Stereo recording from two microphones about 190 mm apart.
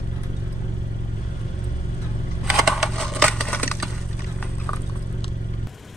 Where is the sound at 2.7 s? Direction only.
Centre (ahead or behind).